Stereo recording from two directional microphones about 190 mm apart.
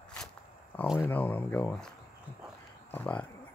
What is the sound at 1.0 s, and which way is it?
Speech, 10° left (ahead or behind).